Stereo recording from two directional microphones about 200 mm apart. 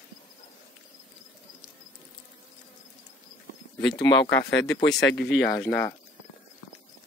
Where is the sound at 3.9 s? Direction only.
25° left (ahead or behind).